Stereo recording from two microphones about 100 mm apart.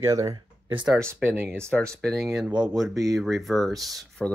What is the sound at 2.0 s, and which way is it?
Speech, centre (ahead or behind).